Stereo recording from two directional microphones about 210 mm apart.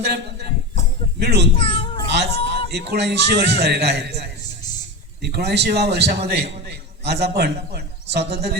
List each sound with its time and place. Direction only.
0.0 s a man's voice: 50° right (ahead or behind)
1.5 s a sound: 25° left (ahead or behind)
2.0 s music: 50° right (ahead or behind)
2.6 s a man's voice: 50° right (ahead or behind)